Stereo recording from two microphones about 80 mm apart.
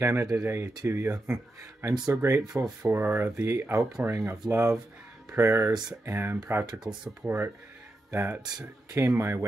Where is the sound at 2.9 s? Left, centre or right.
Right.